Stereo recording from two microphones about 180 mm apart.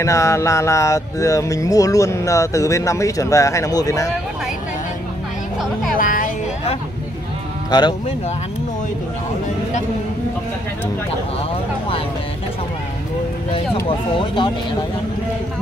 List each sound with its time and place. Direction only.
0.0 s speech: 15° left (ahead or behind)
5.9 s speech: 50° left (ahead or behind)
13.8 s speech: 25° left (ahead or behind)